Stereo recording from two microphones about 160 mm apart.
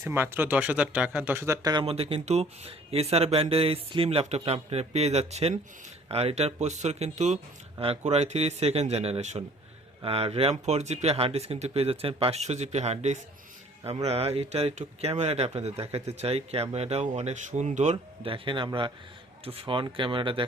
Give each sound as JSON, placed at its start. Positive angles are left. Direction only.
{"t": 0.0, "sound": "speech", "side_deg": -15}
{"t": 1.7, "sound": "speech", "side_deg": -35}
{"t": 17.9, "sound": "speech", "side_deg": -35}